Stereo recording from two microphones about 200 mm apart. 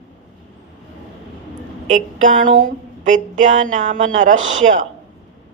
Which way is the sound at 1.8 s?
40° right (ahead or behind).